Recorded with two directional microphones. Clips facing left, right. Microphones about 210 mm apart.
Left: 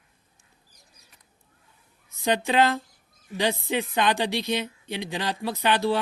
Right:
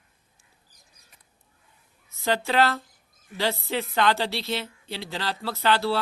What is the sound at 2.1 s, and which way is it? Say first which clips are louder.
Speech: left 1 dB; 15° left (ahead or behind).